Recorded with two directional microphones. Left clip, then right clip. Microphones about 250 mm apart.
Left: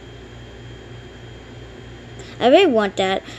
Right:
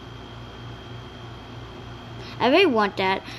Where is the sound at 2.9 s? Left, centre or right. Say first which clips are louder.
Left 3 dB; left.